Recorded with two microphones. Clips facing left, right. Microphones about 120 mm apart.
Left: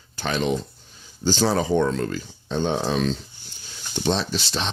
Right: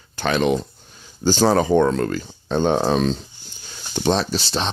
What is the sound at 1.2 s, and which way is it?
Speech, 50° right (ahead or behind).